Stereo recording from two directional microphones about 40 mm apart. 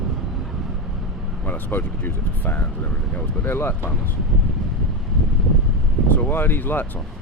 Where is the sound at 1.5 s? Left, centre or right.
Left.